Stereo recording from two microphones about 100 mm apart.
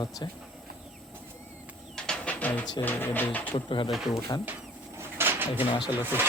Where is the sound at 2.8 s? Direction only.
20° left (ahead or behind).